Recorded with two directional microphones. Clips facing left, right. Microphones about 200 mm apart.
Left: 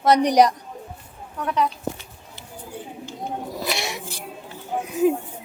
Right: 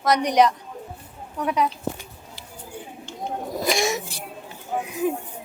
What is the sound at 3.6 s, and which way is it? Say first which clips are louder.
Speech: right 8 dB; 45° right (ahead or behind).